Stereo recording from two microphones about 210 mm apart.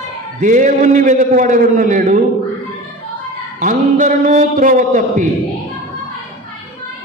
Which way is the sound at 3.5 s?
35° right (ahead or behind).